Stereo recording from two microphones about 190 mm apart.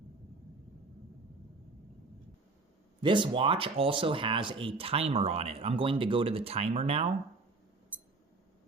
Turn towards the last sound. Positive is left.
turn(degrees=-30)  # may be behind; listen again after turning